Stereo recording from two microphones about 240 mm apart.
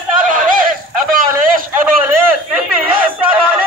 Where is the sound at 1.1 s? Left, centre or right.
Right.